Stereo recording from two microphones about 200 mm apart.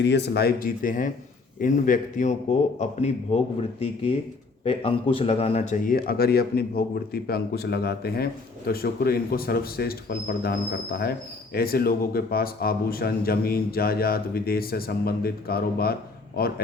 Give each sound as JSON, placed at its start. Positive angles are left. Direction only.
{"t": 0.0, "sound": "a man's voice", "side_deg": 60}